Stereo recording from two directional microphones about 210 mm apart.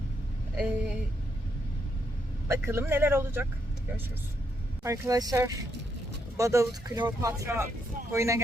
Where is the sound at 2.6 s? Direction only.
10° right (ahead or behind).